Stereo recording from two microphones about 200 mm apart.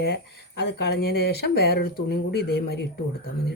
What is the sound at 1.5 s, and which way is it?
Speech, 50° left (ahead or behind).